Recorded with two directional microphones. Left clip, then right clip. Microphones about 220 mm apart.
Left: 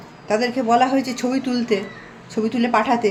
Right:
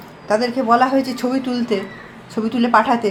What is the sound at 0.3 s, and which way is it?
A woman's voice, 10° left (ahead or behind).